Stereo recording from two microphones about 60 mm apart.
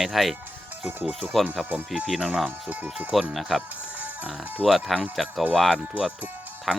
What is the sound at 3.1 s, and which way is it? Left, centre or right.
Speech, centre.